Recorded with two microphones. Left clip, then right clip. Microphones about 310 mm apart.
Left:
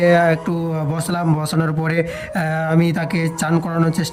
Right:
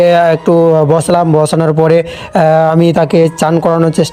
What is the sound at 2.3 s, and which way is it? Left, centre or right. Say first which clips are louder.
Speech: right 15 dB; right.